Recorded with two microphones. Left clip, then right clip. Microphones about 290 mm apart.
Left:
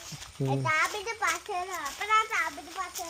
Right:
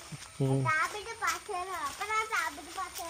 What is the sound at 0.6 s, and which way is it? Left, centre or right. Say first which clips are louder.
A child's voice: left 5 dB; left.